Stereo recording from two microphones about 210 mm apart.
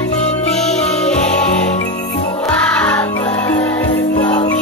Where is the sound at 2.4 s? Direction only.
5° left (ahead or behind).